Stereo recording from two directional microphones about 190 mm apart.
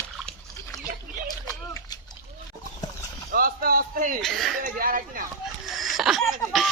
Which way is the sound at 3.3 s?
50° right (ahead or behind).